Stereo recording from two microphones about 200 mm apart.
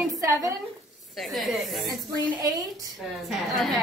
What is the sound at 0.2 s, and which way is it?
Speech, 15° right (ahead or behind).